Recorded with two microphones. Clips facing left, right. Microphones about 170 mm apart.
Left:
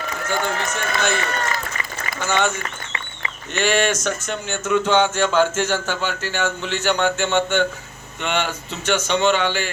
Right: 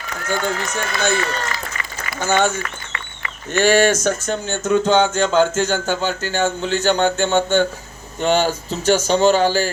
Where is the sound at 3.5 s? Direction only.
40° right (ahead or behind).